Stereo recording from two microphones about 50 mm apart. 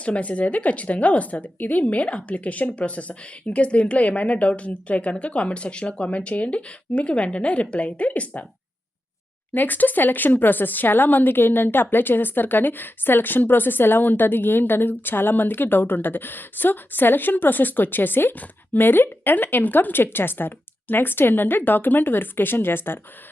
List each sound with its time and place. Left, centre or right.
0.0 s a woman's voice: left
9.6 s speech: left